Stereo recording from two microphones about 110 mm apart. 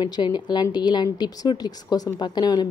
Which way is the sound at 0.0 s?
40° left (ahead or behind).